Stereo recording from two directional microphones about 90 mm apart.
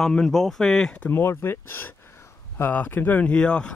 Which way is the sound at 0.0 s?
5° left (ahead or behind).